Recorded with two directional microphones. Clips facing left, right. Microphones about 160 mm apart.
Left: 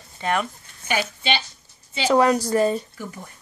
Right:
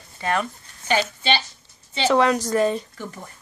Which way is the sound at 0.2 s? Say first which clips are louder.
Even; 15° left (ahead or behind).